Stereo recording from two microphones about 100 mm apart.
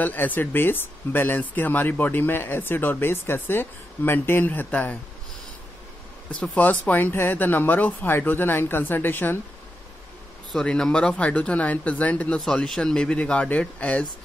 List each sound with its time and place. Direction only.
0.0 s speech: 15° left (ahead or behind)
6.4 s speech: 15° left (ahead or behind)
10.5 s speech: 10° left (ahead or behind)
12.4 s speech: centre (ahead or behind)